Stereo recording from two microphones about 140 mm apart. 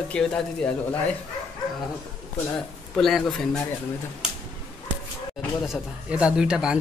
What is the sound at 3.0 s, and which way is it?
Speech, centre (ahead or behind).